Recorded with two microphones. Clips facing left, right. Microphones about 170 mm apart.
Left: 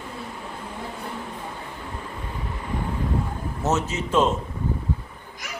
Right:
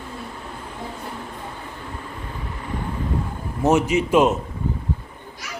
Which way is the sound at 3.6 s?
15° right (ahead or behind).